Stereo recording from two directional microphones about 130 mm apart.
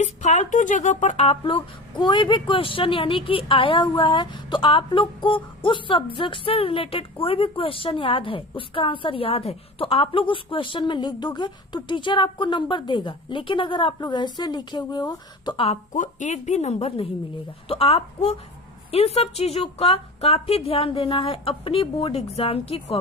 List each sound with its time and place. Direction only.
0.0 s a woman's voice: 65° left (ahead or behind); by 15.8 s 45° left (ahead or behind)
15.9 s a woman's voice: 70° left (ahead or behind); by 23.0 s 50° left (ahead or behind)